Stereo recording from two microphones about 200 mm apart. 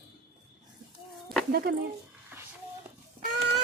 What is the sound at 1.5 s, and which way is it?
Speech, 50° right (ahead or behind).